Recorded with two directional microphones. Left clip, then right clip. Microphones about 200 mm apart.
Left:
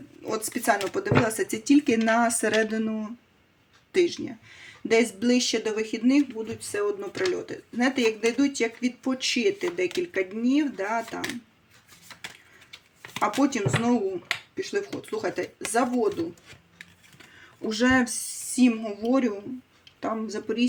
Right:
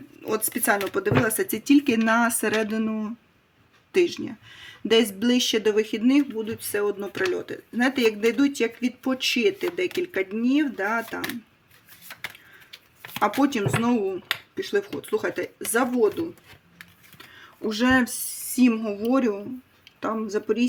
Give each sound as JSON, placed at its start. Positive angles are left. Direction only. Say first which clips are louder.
{"t": 0.2, "sound": "speech", "louder": "right 3 dB", "side_deg": -30}
{"t": 12.7, "sound": "speech", "louder": "right 1 dB", "side_deg": -30}
{"t": 17.6, "sound": "speech", "louder": "right 1 dB", "side_deg": -25}